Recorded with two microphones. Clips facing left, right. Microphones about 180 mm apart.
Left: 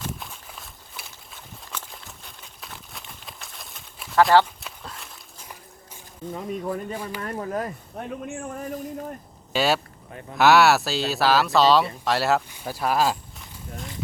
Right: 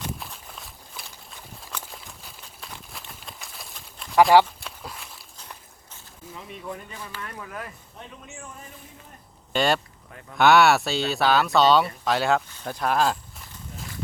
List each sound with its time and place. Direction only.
0.0 s walk: centre (ahead or behind)
4.2 s speech: 15° right (ahead or behind)
4.4 s walk: centre (ahead or behind)
5.4 s biting: 10° left (ahead or behind)
6.3 s speech: 45° left (ahead or behind)
8.0 s speech: 55° left (ahead or behind)
9.5 s speech: 5° left (ahead or behind)
10.1 s speech: 30° left (ahead or behind)
10.3 s speech: centre (ahead or behind)